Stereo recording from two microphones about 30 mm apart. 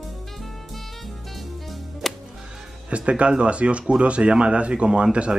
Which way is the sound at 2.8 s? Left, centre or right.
Right.